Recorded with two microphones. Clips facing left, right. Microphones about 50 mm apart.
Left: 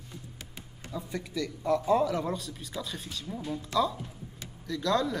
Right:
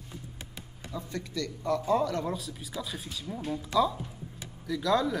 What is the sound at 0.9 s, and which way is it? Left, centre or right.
Speech, centre.